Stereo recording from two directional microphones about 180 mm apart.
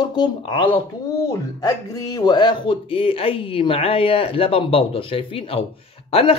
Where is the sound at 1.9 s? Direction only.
20° left (ahead or behind).